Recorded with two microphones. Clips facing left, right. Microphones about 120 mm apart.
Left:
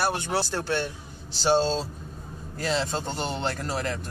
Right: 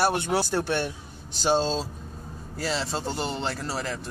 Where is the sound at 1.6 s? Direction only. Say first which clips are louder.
Left 1 dB; centre (ahead or behind).